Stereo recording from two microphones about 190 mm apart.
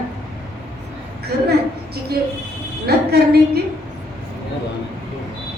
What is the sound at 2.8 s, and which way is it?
Speech, 55° right (ahead or behind).